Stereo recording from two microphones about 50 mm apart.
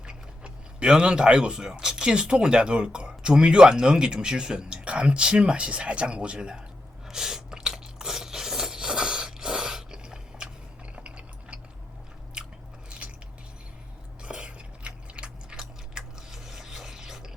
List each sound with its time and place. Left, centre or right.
0.0 s speech: centre
7.1 s rub: centre
14.2 s biting: right
15.5 s biting: centre